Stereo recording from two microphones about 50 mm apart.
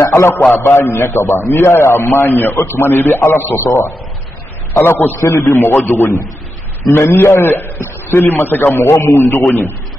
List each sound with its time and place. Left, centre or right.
0.0 s a man's voice: left
3.6 s a man's voice: left
4.7 s a man's voice: left
7.4 s a man's voice: left
8.8 s a man's voice: left